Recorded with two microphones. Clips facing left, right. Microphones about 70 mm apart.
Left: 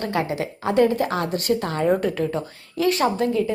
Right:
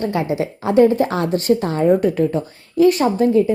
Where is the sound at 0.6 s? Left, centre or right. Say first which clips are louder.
Right 5 dB; right.